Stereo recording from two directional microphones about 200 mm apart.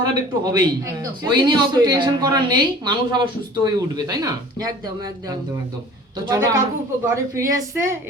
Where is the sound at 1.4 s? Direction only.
20° right (ahead or behind).